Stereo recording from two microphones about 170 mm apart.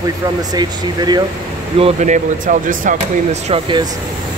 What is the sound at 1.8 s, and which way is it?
Speech, 40° right (ahead or behind).